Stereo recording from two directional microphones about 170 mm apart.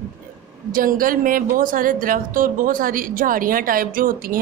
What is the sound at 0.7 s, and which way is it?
A woman's voice, 55° right (ahead or behind).